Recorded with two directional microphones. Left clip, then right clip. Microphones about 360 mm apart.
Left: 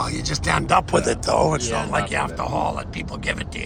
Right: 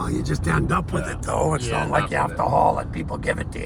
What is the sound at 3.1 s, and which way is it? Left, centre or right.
Speech, centre.